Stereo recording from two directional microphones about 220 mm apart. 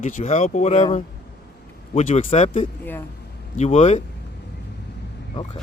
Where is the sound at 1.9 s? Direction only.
30° left (ahead or behind).